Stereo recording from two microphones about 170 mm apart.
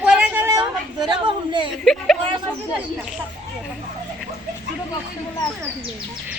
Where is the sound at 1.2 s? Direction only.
30° right (ahead or behind).